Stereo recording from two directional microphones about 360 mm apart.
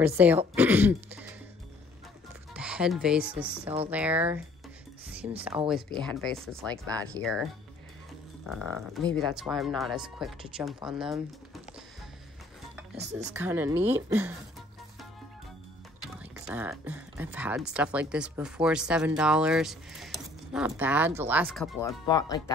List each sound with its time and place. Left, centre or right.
0.0 s speech: centre
2.5 s speech: centre
5.4 s speech: centre
8.5 s speech: centre
12.9 s speech: right
13.3 s speech: centre
16.0 s speech: centre